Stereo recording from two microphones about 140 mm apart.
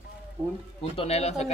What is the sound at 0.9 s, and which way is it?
Speech, 45° left (ahead or behind).